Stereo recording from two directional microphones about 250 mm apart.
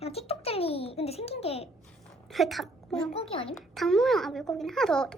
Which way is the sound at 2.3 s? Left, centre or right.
Centre.